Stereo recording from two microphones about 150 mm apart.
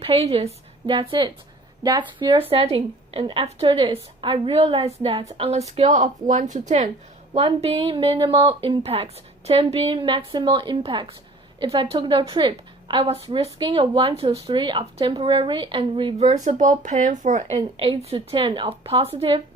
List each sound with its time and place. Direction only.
0.0 s a woman's voice: 40° right (ahead or behind)
7.3 s a woman's voice: 40° right (ahead or behind)
16.1 s speech: 50° right (ahead or behind)
17.7 s a woman's voice: 40° right (ahead or behind)